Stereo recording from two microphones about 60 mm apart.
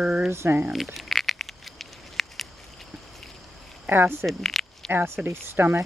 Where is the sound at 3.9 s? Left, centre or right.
Right.